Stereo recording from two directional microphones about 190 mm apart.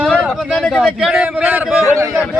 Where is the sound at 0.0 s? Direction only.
Centre (ahead or behind).